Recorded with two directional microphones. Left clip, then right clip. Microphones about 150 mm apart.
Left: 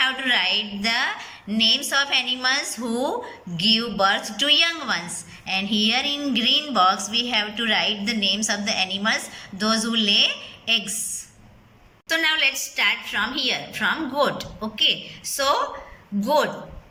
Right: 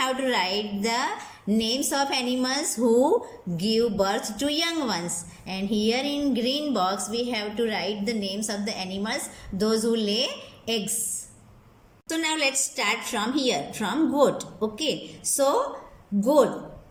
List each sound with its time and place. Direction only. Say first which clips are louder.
0.0 s a woman's voice: left 4 dB; 40° right (ahead or behind)
12.0 s a woman's voice: left 5 dB; 40° right (ahead or behind)